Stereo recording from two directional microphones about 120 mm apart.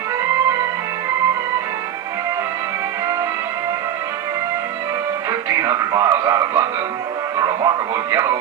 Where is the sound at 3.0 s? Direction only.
30° right (ahead or behind).